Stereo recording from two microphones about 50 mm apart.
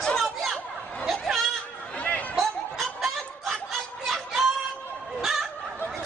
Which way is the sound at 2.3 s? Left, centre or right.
Centre.